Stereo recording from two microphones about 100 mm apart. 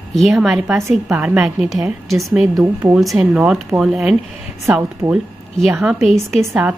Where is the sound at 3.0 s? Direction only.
Centre (ahead or behind).